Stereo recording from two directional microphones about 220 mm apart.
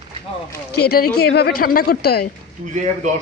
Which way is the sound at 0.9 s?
45° left (ahead or behind).